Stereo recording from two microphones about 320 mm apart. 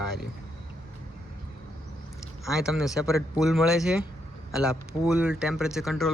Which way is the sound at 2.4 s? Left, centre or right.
Centre.